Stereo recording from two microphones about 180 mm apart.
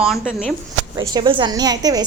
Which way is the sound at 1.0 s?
25° right (ahead or behind).